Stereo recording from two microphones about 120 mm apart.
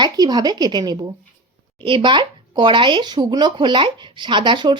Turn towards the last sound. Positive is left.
turn(degrees=-40)  # may be behind; listen again after turning